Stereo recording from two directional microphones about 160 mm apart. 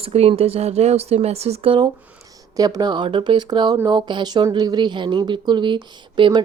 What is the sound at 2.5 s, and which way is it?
A woman's voice, 25° right (ahead or behind).